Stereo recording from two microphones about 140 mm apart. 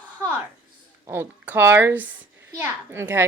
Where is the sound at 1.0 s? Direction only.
15° right (ahead or behind).